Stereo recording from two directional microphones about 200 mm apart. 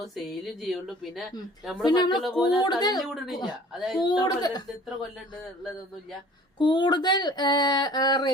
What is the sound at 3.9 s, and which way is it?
Speech, 20° left (ahead or behind).